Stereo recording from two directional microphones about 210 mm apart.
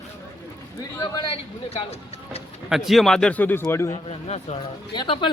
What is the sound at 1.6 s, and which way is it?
Vehicle, 30° left (ahead or behind).